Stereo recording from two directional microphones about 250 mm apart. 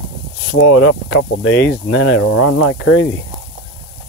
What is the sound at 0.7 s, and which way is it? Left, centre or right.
Speech, left.